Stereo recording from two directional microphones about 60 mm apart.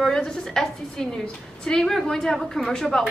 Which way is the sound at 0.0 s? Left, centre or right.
Centre.